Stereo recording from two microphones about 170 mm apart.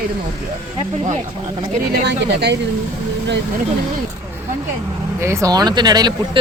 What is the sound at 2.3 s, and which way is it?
Speech, 85° right.